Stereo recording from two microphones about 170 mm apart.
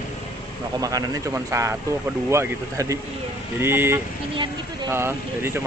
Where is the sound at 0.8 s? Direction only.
20° right (ahead or behind).